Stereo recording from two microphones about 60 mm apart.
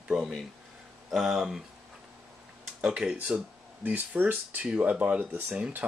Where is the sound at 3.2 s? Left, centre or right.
Right.